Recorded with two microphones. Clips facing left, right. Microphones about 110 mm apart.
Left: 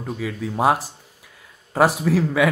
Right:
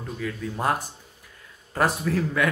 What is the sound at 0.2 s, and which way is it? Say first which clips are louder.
A man's voice: left 7 dB; 90° left.